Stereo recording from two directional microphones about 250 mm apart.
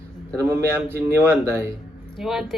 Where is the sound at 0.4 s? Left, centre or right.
Centre.